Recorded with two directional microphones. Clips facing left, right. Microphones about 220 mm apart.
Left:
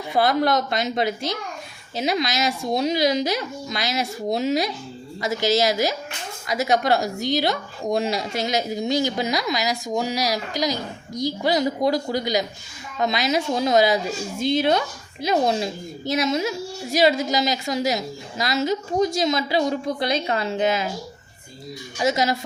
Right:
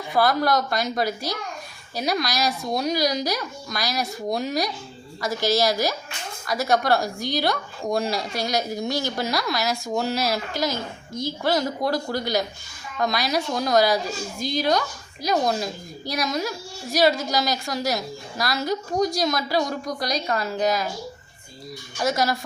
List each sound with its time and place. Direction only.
0.1 s a woman's voice: 20° left (ahead or behind)
22.0 s a woman's voice: 20° left (ahead or behind)